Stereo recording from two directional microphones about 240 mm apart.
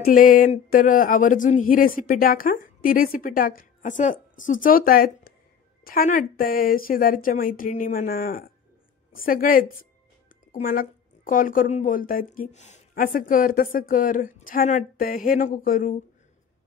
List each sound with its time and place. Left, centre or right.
0.0 s a woman's voice: left